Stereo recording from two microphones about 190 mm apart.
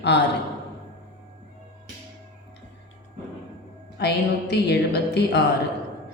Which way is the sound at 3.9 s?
60° left (ahead or behind).